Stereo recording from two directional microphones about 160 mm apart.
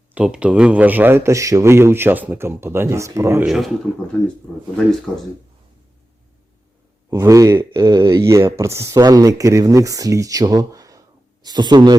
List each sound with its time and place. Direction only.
0.1 s a man's voice: 10° right (ahead or behind)
3.4 s speech: 5° right (ahead or behind)
7.1 s speech: 20° right (ahead or behind)